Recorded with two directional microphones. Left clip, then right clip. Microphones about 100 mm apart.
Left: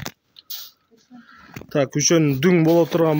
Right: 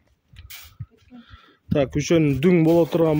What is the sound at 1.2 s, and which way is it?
Speech, 5° right (ahead or behind).